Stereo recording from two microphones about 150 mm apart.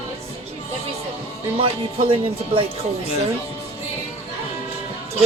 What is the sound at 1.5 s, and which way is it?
Speech, 40° right (ahead or behind).